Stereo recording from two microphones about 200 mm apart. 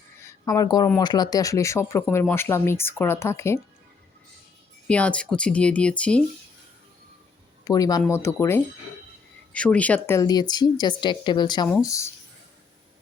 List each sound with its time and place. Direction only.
0.3 s a woman's voice: 20° left (ahead or behind)
4.9 s speech: 5° left (ahead or behind)
7.6 s speech: 20° left (ahead or behind)